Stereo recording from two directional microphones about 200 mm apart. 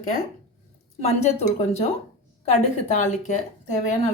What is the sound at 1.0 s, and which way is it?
Speech, 30° left (ahead or behind).